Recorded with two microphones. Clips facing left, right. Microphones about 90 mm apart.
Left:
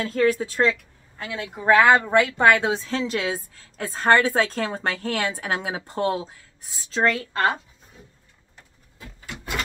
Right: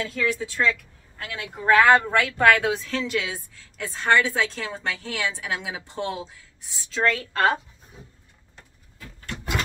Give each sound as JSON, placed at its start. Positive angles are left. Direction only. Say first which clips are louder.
{"t": 0.0, "sound": "speech", "louder": "left 5 dB", "side_deg": 45}
{"t": 0.7, "sound": "a woman's voice", "louder": "left 1 dB", "side_deg": 20}
{"t": 9.2, "sound": "a sound", "louder": "right 3 dB", "side_deg": 10}